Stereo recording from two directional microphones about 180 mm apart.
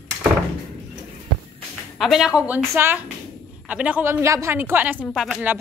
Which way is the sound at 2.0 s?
Centre (ahead or behind).